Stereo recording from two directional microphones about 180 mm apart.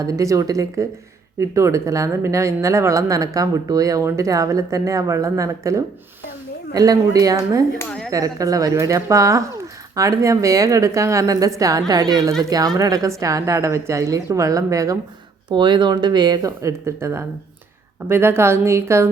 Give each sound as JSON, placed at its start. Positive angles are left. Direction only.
{"t": 0.0, "sound": "a woman's voice", "side_deg": -20}
{"t": 7.8, "sound": "speech", "side_deg": 5}
{"t": 8.1, "sound": "a woman's voice", "side_deg": -20}